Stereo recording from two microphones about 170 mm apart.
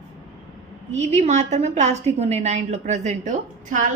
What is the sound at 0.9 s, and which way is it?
A woman's voice, 40° right (ahead or behind).